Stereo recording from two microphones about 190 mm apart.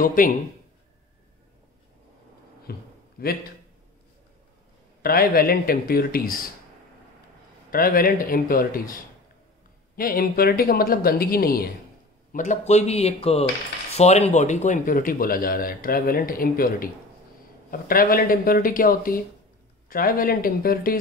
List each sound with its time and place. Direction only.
0.0 s a man's voice: 45° left (ahead or behind)
2.7 s a man's voice: 55° left (ahead or behind)
5.0 s a man's voice: 50° left (ahead or behind)
7.7 s a man's voice: 50° left (ahead or behind)
12.3 s a man's voice: 40° left (ahead or behind)